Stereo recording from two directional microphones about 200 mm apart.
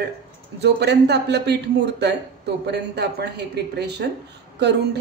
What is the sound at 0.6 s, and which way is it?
A man's voice, 55° right (ahead or behind).